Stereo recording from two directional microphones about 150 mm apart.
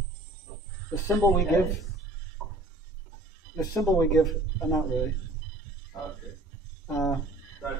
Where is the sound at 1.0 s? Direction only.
20° left (ahead or behind).